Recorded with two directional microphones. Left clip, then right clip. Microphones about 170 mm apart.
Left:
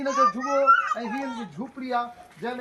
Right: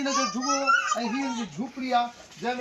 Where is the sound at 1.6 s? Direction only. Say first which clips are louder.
Right 1 dB; 10° left (ahead or behind).